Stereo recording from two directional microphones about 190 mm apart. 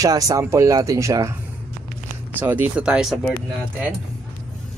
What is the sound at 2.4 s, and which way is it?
Speech, 10° right (ahead or behind).